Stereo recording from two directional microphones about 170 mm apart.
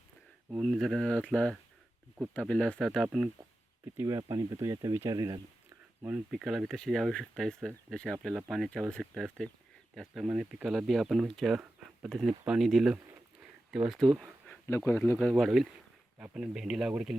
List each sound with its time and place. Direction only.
0.5 s speech: centre (ahead or behind)
3.9 s speech: 20° right (ahead or behind)
6.0 s speech: 10° right (ahead or behind)
14.8 s speech: 15° left (ahead or behind); by 17.2 s 5° right (ahead or behind)